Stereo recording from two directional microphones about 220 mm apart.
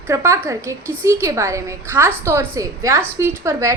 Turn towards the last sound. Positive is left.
turn(degrees=-15)  # may be behind; listen again after turning